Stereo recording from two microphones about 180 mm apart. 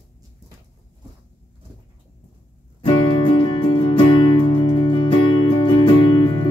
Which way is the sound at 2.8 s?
25° left (ahead or behind).